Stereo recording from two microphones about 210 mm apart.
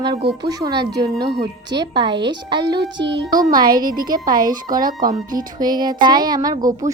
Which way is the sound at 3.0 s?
55° right (ahead or behind).